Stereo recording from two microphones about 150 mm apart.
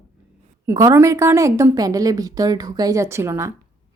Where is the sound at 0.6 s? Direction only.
20° right (ahead or behind).